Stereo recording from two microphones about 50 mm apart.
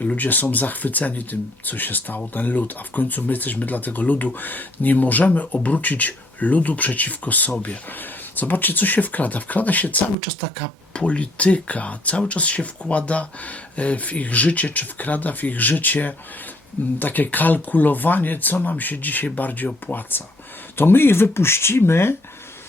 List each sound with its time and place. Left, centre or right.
0.2 s speech: left